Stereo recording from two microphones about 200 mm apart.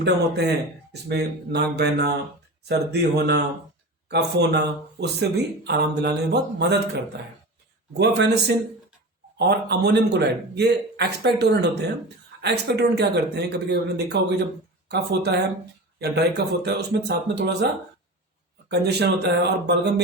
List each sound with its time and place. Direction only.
0.0 s speech: 60° right (ahead or behind)
7.9 s speech: 55° right (ahead or behind)
18.7 s speech: 55° right (ahead or behind)